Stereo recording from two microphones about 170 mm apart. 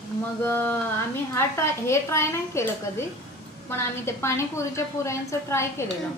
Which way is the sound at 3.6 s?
15° left (ahead or behind).